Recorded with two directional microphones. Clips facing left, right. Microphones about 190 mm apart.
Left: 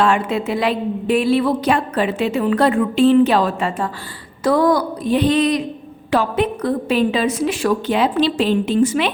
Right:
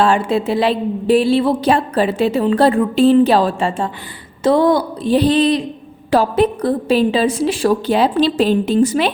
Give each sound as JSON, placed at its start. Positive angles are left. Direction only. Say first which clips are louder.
{"t": 0.0, "sound": "a woman's voice", "louder": "right 2 dB", "side_deg": -30}